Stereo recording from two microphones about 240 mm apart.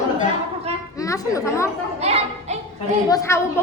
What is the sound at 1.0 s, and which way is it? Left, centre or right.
Speech, centre.